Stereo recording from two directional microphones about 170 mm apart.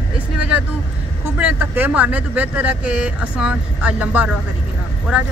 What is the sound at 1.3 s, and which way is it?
Speech, 10° right (ahead or behind).